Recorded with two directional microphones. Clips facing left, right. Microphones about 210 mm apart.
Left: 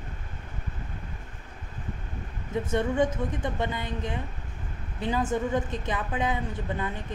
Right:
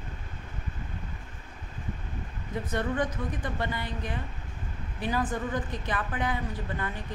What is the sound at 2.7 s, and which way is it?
A woman's voice, 25° left (ahead or behind).